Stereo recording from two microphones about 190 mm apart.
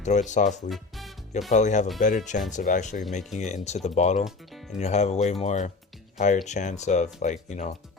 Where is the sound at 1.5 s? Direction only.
40° left (ahead or behind).